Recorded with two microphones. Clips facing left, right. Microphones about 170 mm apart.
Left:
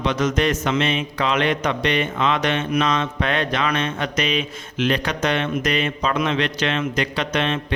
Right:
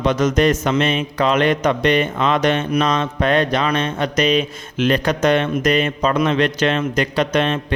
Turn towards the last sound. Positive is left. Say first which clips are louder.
# right 4 dB
turn(degrees=-45)  # may be behind; listen again after turning